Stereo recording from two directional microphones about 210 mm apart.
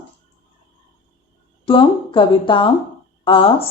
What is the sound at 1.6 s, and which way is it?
Speech, 25° left (ahead or behind).